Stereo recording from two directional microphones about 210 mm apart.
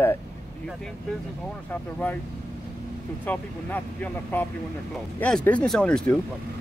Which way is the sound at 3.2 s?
10° left (ahead or behind).